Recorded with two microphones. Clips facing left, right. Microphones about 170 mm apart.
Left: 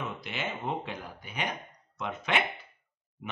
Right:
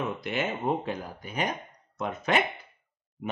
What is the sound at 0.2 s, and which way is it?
Speech, 50° right (ahead or behind).